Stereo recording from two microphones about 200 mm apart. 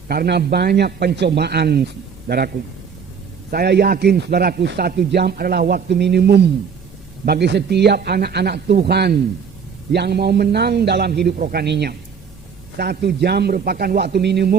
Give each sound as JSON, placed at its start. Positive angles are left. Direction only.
{"t": 0.1, "sound": "a man's voice", "side_deg": -50}
{"t": 3.5, "sound": "a man's voice", "side_deg": -50}